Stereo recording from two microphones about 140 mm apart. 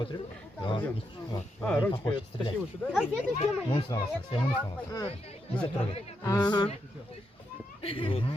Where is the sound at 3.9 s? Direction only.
35° left (ahead or behind).